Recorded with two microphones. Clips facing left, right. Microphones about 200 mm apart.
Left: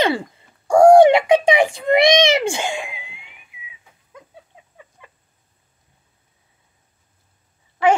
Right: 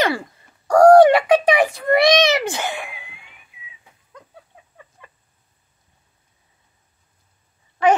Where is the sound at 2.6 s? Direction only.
15° left (ahead or behind).